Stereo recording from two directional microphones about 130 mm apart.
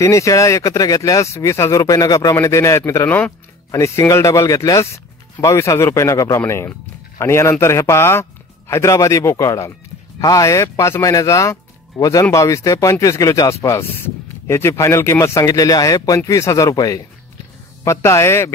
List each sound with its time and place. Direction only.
0.0 s speech: 25° left (ahead or behind)
3.7 s speech: 25° left (ahead or behind)